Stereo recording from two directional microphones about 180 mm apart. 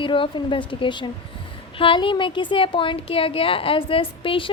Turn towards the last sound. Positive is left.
turn(degrees=30)  # may be behind; listen again after turning